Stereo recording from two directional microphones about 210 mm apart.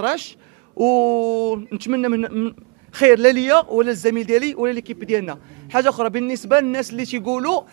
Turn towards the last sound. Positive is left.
turn(degrees=-15)  # may be behind; listen again after turning